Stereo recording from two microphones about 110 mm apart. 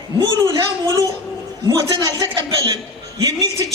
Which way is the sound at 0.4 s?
30° right (ahead or behind).